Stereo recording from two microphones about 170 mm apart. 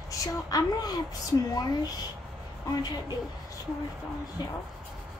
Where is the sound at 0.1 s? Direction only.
20° left (ahead or behind).